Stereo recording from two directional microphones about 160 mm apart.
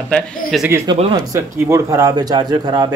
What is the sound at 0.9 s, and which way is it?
Speech, 25° right (ahead or behind).